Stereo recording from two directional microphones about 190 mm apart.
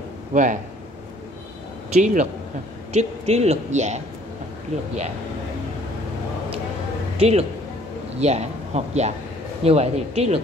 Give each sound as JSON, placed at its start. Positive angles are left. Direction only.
{"t": 0.3, "sound": "speech", "side_deg": -40}
{"t": 1.9, "sound": "a woman's voice", "side_deg": -40}
{"t": 7.2, "sound": "a woman's voice", "side_deg": -30}